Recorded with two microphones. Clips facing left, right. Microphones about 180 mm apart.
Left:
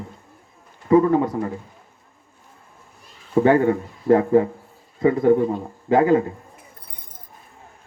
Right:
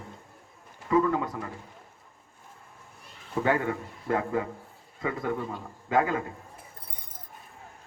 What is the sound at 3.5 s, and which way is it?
Speech, 40° left (ahead or behind).